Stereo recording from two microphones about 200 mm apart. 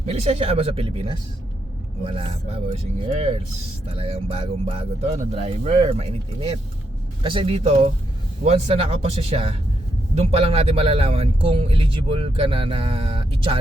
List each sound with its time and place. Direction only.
0.0 s speech: 30° right (ahead or behind)